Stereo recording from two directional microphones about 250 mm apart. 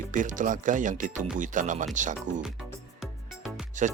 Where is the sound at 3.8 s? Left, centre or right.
Right.